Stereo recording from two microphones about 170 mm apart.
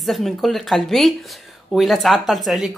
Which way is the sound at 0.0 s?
Centre (ahead or behind).